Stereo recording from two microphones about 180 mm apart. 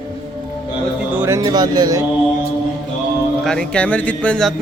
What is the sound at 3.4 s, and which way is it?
Speech, 5° left (ahead or behind).